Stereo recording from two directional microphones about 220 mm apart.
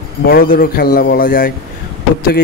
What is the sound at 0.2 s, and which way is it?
Speech, 40° left (ahead or behind).